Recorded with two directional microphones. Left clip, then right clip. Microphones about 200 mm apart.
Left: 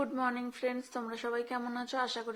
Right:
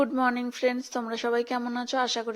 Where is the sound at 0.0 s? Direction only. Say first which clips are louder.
Right 8 dB; 30° right (ahead or behind).